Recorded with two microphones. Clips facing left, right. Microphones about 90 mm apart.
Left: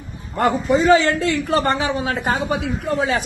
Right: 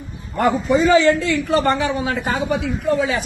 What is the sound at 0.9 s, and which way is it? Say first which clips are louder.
A man's voice: right 1 dB; 45° left (ahead or behind).